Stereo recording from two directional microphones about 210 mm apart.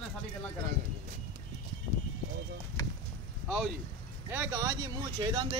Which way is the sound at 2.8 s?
15° left (ahead or behind).